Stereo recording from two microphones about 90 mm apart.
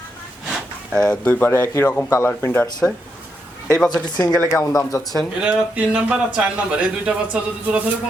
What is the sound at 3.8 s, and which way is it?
Speech, 50° left (ahead or behind).